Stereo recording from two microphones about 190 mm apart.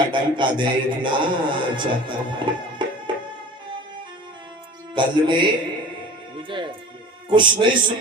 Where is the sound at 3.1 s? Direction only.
25° right (ahead or behind).